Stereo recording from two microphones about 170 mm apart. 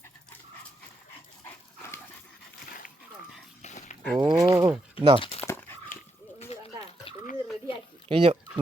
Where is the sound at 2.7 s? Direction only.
60° left (ahead or behind).